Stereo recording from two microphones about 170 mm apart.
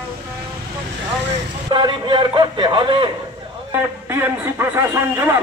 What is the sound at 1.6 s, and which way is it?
A man's voice, 25° right (ahead or behind).